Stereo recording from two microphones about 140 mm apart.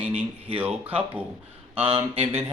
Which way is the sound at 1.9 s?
45° right (ahead or behind).